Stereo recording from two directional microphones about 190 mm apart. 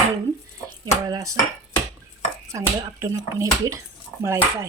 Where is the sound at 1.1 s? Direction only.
20° right (ahead or behind).